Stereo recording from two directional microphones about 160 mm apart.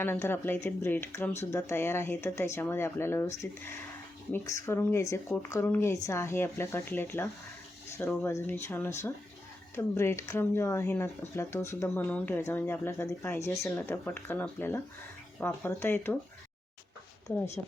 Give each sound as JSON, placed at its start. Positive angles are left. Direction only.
{"t": 0.0, "sound": "speech", "side_deg": 15}